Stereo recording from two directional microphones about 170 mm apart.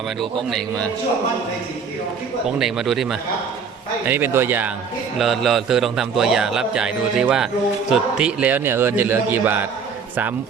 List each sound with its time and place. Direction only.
2.6 s a man's voice: centre (ahead or behind)
4.0 s speech: 10° right (ahead or behind)
5.1 s a man's voice: centre (ahead or behind)